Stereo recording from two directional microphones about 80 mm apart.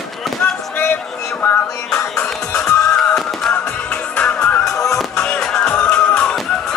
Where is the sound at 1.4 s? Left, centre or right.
Left.